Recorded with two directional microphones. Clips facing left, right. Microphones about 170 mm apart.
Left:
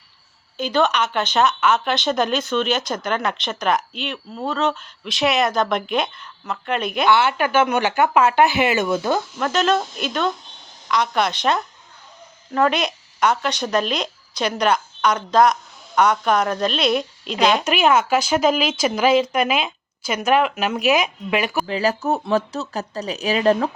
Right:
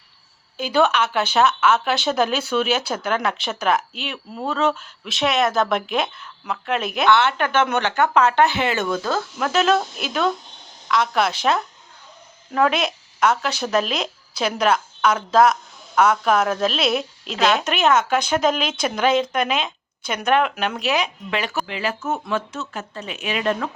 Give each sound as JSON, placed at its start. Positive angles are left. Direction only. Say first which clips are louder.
{"t": 0.5, "sound": "speech", "louder": "right 1 dB", "side_deg": -5}
{"t": 9.4, "sound": "speech", "louder": "right 3 dB", "side_deg": -5}
{"t": 17.7, "sound": "speech", "louder": "left 1 dB", "side_deg": 10}
{"t": 21.7, "sound": "speech", "louder": "left 5 dB", "side_deg": 40}